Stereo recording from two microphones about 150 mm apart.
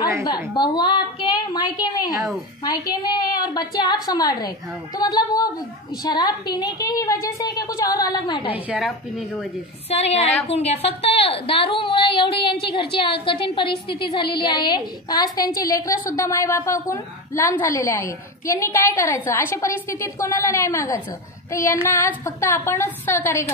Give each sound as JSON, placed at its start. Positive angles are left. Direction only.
{"t": 0.2, "sound": "a woman's voice", "side_deg": 25}
{"t": 8.6, "sound": "a woman's voice", "side_deg": 0}
{"t": 9.8, "sound": "a woman's voice", "side_deg": 45}
{"t": 21.5, "sound": "a sound", "side_deg": 20}
{"t": 21.9, "sound": "a woman's voice", "side_deg": 15}